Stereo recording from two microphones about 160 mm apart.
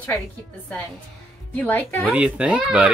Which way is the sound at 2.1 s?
10° right (ahead or behind).